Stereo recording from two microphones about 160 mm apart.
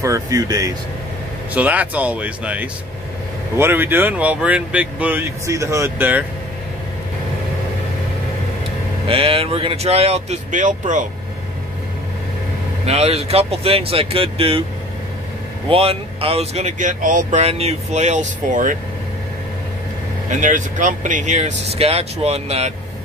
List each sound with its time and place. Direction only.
0.0 s speech: 20° right (ahead or behind)
1.5 s speech: 10° right (ahead or behind)
9.0 s speech: 35° right (ahead or behind); by 11.1 s 50° right (ahead or behind)
12.8 s speech: 40° right (ahead or behind)
15.7 s speech: 35° right (ahead or behind); by 18.8 s 55° right (ahead or behind)
20.2 s speech: 55° right (ahead or behind)